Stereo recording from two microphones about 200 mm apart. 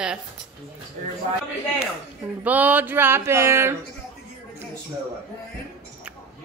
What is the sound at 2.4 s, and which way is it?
Speech, 10° right (ahead or behind).